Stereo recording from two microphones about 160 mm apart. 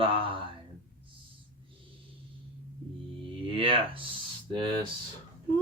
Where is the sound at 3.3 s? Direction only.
35° right (ahead or behind).